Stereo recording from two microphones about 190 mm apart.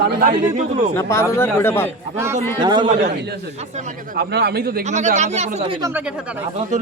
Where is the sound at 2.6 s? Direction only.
25° right (ahead or behind).